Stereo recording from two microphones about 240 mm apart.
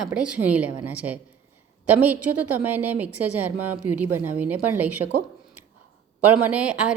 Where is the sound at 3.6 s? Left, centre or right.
Right.